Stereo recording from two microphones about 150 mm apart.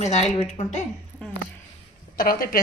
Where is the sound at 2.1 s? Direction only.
75° left (ahead or behind).